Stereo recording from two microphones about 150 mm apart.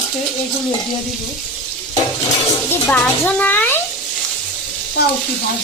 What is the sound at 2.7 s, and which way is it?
A child's voice, 15° left (ahead or behind).